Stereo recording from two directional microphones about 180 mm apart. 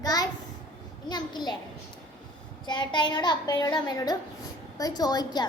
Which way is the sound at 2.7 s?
25° left (ahead or behind).